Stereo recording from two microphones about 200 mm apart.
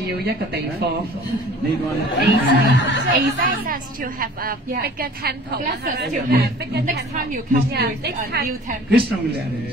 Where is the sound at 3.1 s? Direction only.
45° right (ahead or behind).